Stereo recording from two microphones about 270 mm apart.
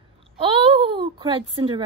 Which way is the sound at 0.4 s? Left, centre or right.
Centre.